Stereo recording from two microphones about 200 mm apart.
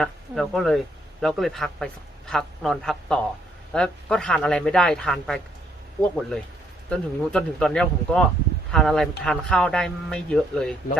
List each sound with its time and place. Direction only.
0.0 s a man's voice: centre (ahead or behind)